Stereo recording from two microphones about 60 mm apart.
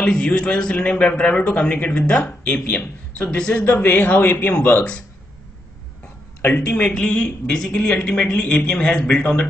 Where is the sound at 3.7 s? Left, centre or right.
Left.